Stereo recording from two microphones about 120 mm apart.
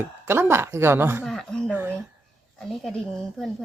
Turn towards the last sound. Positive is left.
turn(degrees=0)  # may be behind; listen again after turning